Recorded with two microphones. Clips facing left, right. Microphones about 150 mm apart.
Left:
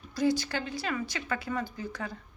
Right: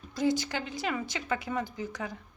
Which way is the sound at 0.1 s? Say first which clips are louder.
Left 1 dB; 20° right (ahead or behind).